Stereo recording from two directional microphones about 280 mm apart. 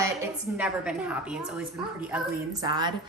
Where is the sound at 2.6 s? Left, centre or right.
Centre.